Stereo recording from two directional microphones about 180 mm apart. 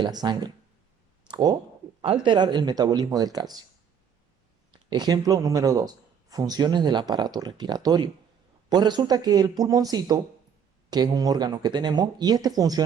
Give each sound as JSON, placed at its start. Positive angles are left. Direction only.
{"t": 0.0, "sound": "speech", "side_deg": -25}
{"t": 4.7, "sound": "speech", "side_deg": -25}